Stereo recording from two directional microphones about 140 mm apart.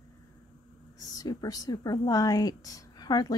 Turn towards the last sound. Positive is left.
turn(degrees=30)  # may be behind; listen again after turning